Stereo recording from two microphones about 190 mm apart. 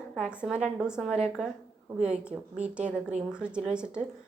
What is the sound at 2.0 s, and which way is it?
Speech, 35° right (ahead or behind).